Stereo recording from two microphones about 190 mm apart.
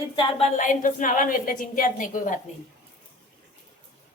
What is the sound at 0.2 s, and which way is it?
A woman's voice, 30° left (ahead or behind).